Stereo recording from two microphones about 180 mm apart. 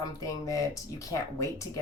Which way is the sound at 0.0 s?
20° left (ahead or behind).